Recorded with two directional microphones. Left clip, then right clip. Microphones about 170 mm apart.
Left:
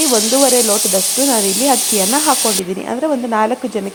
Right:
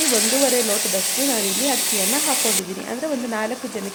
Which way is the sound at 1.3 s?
25° left (ahead or behind).